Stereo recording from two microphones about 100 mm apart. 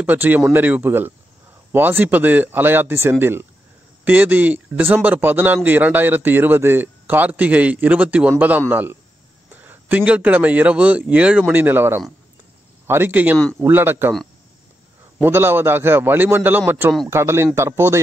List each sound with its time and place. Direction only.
0.0 s a man's voice: 20° right (ahead or behind)
15.1 s a man's voice: 20° right (ahead or behind)